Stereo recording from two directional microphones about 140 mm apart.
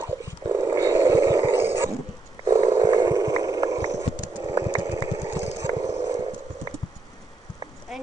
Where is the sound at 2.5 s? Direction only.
25° right (ahead or behind).